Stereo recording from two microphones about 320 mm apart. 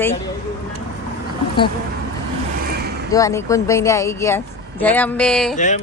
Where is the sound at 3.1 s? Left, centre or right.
Centre.